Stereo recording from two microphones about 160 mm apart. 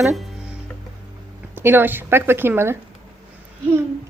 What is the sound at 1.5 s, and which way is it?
Speech, 15° right (ahead or behind).